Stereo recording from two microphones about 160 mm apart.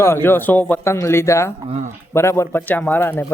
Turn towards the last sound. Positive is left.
turn(degrees=10)  # may be behind; listen again after turning